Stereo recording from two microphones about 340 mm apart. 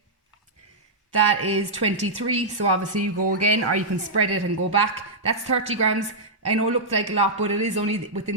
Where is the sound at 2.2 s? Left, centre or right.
Right.